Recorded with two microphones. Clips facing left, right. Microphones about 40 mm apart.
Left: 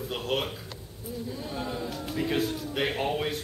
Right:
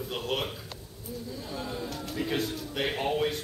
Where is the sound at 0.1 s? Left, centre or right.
Centre.